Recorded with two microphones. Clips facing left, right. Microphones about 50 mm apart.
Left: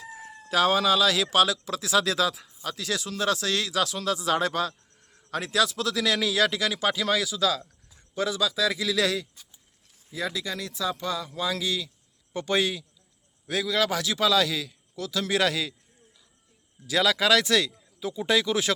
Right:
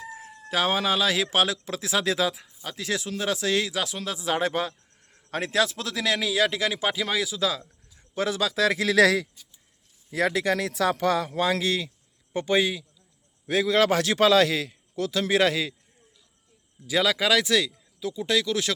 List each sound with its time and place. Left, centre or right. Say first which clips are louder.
0.4 s speech: left 2 dB; centre
5.3 s speech: right 1 dB; right
6.1 s speech: even; centre
8.1 s a man's voice: right 1 dB; right
9.0 s speech: right 10 dB; right
10.1 s speech: right 7 dB; right
11.3 s a man's voice: right 4 dB; right
12.5 s speech: right 2 dB; centre
13.5 s a man's voice: right 4 dB; right
16.8 s speech: even; centre
18.1 s speech: left 1 dB; centre